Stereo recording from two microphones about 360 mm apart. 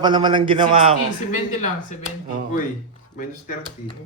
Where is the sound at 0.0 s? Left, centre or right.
Centre.